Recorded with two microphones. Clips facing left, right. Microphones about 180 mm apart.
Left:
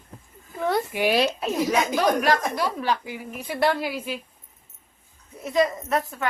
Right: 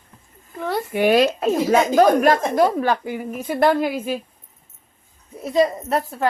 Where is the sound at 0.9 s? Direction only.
50° right (ahead or behind).